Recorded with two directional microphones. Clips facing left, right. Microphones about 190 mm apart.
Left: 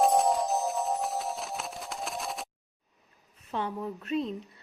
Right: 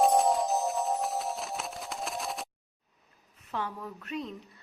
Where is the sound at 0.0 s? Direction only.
Centre (ahead or behind).